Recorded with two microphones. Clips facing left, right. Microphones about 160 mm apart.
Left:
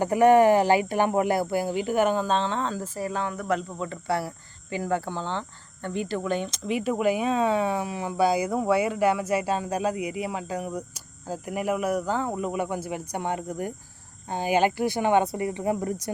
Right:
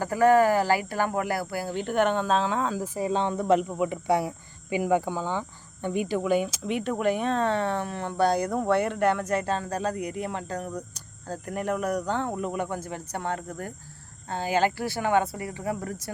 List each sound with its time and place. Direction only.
0.0 s speech: 20° left (ahead or behind)
1.7 s speech: 5° left (ahead or behind)